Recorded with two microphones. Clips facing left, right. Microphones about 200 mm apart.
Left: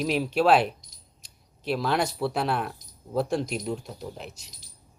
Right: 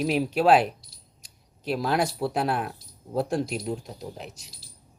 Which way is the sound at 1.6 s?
Centre (ahead or behind).